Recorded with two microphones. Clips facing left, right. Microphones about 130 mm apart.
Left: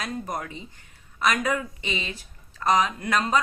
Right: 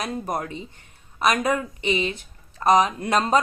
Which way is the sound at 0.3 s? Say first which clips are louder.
Right 4 dB; 30° right (ahead or behind).